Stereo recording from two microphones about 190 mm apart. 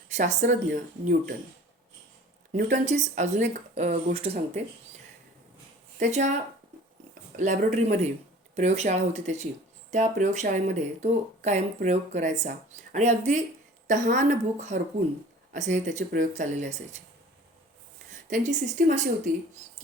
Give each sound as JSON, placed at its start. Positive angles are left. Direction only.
{"t": 0.2, "sound": "speech", "side_deg": -40}
{"t": 2.5, "sound": "speech", "side_deg": -40}
{"t": 6.0, "sound": "speech", "side_deg": -35}
{"t": 18.1, "sound": "speech", "side_deg": -40}